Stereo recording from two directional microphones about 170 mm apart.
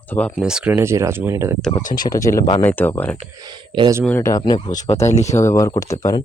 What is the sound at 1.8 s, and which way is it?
Speech, 50° left (ahead or behind).